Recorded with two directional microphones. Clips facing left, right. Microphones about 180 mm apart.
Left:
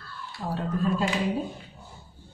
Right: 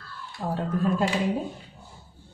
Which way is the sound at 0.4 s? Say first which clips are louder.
Right 2 dB; 45° right (ahead or behind).